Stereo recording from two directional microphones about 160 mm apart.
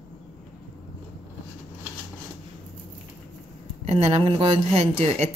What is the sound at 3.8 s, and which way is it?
Speech, 40° right (ahead or behind).